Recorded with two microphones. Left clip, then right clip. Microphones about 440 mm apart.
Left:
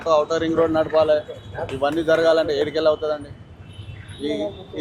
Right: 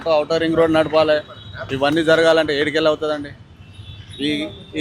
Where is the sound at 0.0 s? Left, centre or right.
Right.